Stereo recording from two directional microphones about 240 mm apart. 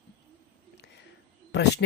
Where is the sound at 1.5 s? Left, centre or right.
Left.